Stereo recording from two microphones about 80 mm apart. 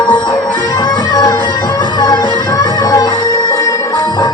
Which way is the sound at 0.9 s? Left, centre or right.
Left.